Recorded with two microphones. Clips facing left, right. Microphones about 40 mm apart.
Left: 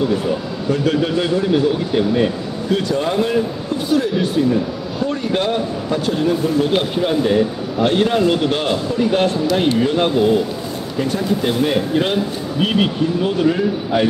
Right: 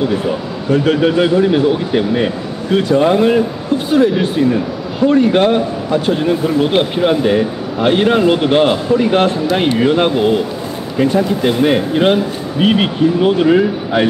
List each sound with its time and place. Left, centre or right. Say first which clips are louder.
0.7 s a man's voice: right 5 dB; right